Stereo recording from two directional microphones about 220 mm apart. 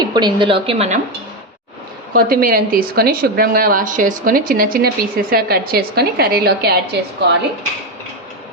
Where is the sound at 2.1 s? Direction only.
40° right (ahead or behind).